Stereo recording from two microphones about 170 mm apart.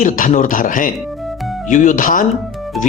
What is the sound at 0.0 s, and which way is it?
Speech, 50° left (ahead or behind).